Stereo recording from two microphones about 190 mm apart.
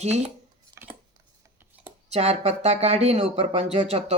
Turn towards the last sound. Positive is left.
turn(degrees=-35)  # may be behind; listen again after turning